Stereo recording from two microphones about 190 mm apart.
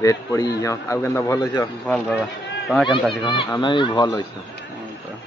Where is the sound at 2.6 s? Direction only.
Centre (ahead or behind).